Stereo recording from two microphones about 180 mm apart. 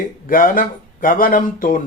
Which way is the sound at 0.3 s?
50° left (ahead or behind).